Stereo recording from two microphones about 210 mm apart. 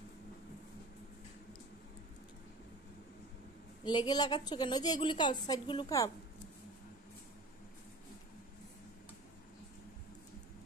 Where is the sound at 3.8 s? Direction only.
20° left (ahead or behind).